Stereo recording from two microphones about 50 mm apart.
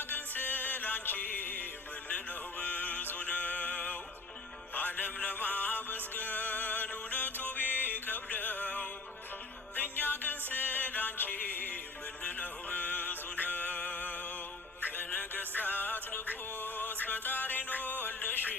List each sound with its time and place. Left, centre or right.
0.1 s music: left